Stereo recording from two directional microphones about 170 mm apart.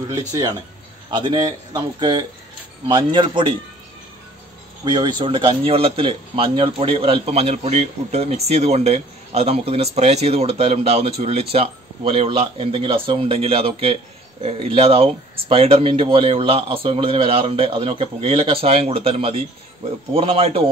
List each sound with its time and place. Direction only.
0.3 s speech: 20° right (ahead or behind)
4.8 s speech: 25° right (ahead or behind)